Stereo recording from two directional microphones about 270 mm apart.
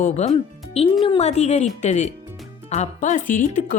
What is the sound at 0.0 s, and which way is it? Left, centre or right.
Speech, left.